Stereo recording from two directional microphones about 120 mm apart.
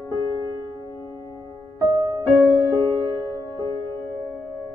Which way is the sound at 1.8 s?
35° right (ahead or behind).